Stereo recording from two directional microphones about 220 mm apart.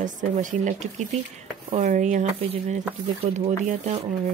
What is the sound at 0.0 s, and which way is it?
A woman's voice, 35° right (ahead or behind).